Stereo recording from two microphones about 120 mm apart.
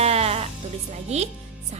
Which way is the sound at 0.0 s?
60° right (ahead or behind).